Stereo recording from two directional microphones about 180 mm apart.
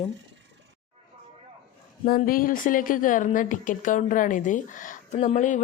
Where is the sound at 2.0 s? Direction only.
50° left (ahead or behind).